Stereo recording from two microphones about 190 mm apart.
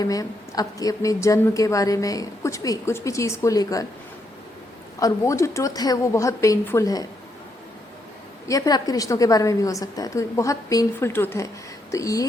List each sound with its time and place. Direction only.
0.0 s a woman's voice: 20° left (ahead or behind)
4.9 s a woman's voice: 15° left (ahead or behind)
8.4 s a woman's voice: 20° left (ahead or behind)